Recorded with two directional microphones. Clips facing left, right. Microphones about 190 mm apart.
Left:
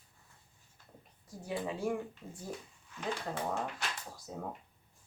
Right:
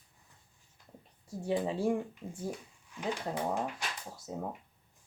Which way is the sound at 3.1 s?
15° right (ahead or behind).